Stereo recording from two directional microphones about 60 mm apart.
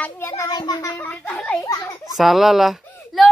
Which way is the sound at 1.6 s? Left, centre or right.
Left.